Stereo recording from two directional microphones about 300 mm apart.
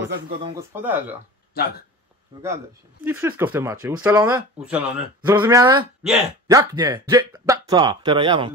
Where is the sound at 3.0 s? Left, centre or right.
Centre.